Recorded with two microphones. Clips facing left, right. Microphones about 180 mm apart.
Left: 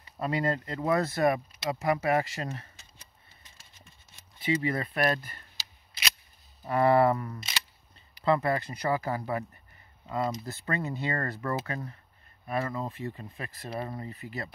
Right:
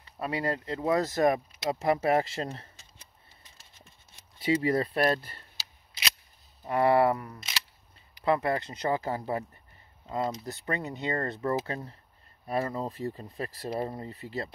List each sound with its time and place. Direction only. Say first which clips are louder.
0.2 s speech: left 2 dB; 10° right (ahead or behind)
1.7 s speech: right 1 dB; 25° right (ahead or behind)
4.4 s speech: right 3 dB; 35° right (ahead or behind)
6.6 s speech: left 1 dB; 15° right (ahead or behind); by 14.5 s 30° right (ahead or behind)